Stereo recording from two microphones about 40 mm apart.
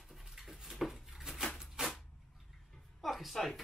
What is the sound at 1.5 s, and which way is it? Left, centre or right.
Typewriter, centre.